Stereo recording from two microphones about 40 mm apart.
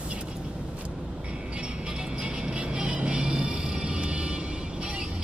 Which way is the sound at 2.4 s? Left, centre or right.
Right.